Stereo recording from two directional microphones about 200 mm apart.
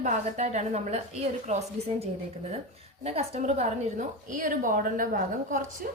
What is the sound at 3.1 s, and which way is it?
A woman's voice, 30° right (ahead or behind).